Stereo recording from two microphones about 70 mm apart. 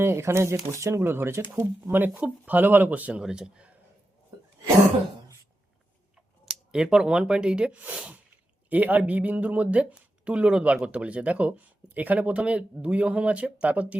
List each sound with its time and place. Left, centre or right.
0.0 s speech: right; by 3.8 s centre
6.4 s speech: centre